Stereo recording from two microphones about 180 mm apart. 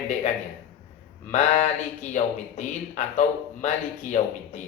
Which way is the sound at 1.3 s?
40° left (ahead or behind).